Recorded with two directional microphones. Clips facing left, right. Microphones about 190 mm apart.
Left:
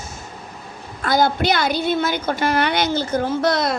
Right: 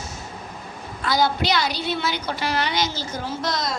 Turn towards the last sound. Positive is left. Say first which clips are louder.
# left 7 dB
turn(degrees=60)  # may be behind; listen again after turning